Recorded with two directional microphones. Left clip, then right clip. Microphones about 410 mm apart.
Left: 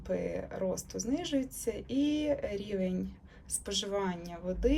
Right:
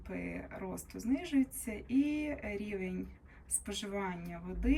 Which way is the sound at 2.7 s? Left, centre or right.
Centre.